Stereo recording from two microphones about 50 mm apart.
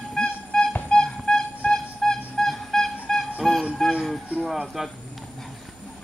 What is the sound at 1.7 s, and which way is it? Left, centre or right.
Music, centre.